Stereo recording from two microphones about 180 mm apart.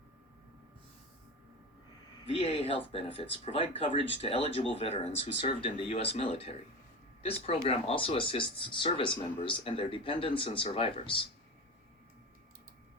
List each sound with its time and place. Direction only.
2.2 s speech: 30° left (ahead or behind)